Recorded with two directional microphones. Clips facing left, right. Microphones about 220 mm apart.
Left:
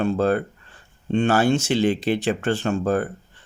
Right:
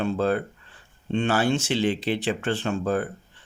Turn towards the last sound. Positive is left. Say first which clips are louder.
# left 3 dB
turn(degrees=45)  # may be behind; listen again after turning